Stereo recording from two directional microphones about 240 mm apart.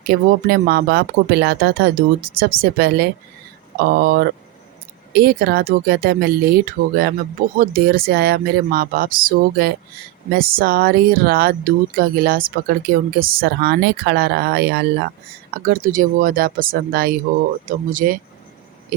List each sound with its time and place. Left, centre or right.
0.1 s speech: right